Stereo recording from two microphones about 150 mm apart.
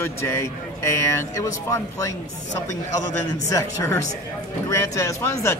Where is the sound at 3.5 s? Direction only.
20° left (ahead or behind).